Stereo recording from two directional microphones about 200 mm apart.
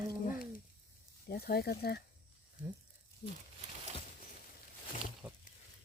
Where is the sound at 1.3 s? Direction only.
50° left (ahead or behind).